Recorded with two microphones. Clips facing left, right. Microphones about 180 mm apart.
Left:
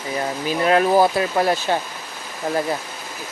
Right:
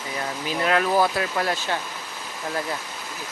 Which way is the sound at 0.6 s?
30° left (ahead or behind).